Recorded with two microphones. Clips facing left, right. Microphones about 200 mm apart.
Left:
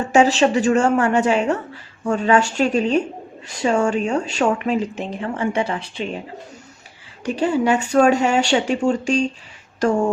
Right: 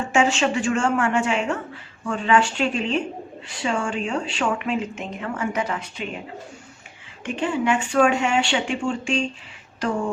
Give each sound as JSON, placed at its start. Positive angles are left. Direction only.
{"t": 0.0, "sound": "a woman's voice", "side_deg": 40}
{"t": 7.3, "sound": "a woman's voice", "side_deg": 40}